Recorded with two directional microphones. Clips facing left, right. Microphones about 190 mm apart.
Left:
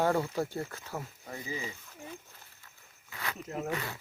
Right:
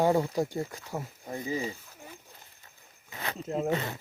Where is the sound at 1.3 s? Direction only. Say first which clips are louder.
Right 7 dB; 35° right (ahead or behind).